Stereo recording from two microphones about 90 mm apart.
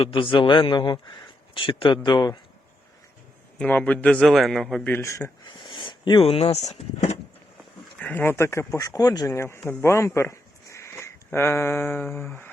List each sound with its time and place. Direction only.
0.0 s a man's voice: 70° left (ahead or behind)
1.5 s speech: 70° left (ahead or behind)
2.0 s a man's voice: 55° left (ahead or behind)
3.6 s a man's voice: 15° left (ahead or behind)
4.2 s a man's voice: centre (ahead or behind)
4.8 s speech: 25° left (ahead or behind)
5.5 s a sound: 60° left (ahead or behind); by 6.6 s 90° left
7.9 s speech: 15° left (ahead or behind)